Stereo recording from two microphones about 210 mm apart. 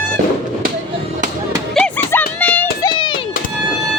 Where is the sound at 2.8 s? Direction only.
20° left (ahead or behind).